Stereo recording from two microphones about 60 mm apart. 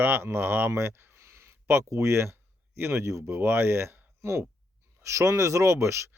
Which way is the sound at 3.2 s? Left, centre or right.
Right.